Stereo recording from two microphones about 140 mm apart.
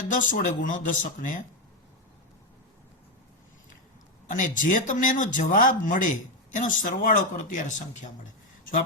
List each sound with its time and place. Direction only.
0.1 s speech: 70° left (ahead or behind)
4.3 s speech: 65° left (ahead or behind)